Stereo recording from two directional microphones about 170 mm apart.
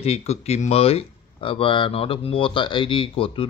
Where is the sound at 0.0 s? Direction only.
40° left (ahead or behind).